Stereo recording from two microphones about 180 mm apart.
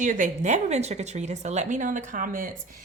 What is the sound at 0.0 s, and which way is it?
A woman's voice, 45° right (ahead or behind).